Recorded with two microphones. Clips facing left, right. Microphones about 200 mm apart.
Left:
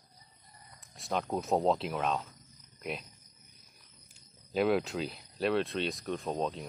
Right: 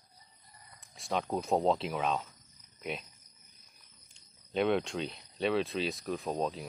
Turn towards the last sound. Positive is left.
turn(degrees=0)  # may be behind; listen again after turning